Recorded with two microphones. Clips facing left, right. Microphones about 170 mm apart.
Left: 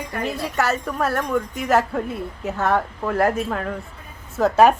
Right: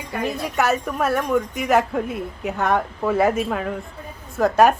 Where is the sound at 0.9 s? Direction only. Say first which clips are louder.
Right 2 dB; centre (ahead or behind).